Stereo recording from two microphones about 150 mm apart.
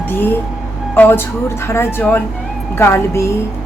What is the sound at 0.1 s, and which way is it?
A woman's voice, 15° left (ahead or behind).